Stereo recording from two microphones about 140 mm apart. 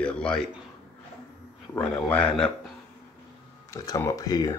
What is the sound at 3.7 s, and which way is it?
Speech, 25° left (ahead or behind).